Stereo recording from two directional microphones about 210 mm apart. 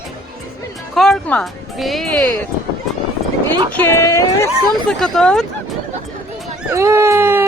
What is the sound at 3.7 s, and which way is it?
Speech, 10° left (ahead or behind).